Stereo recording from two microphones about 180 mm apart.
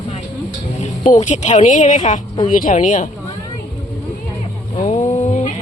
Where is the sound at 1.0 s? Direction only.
45° left (ahead or behind).